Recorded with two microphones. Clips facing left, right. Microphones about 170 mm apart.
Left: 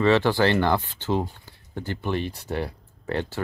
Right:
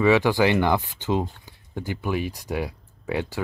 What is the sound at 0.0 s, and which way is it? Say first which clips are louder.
Speech: right 1 dB; 10° right (ahead or behind).